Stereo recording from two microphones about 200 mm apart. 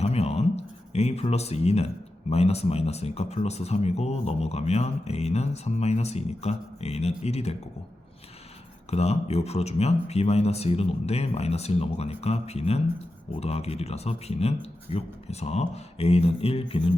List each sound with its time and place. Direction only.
0.0 s a sound: 30° left (ahead or behind)
2.3 s speech: 30° left (ahead or behind)
8.9 s speech: 30° left (ahead or behind)